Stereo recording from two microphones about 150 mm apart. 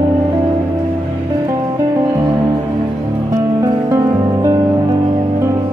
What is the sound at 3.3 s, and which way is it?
Music, 25° right (ahead or behind).